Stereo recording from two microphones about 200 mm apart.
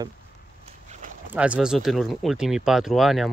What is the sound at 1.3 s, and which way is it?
Speech, 5° right (ahead or behind).